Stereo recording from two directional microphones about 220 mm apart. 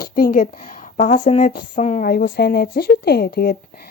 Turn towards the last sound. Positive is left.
turn(degrees=45)  # may be behind; listen again after turning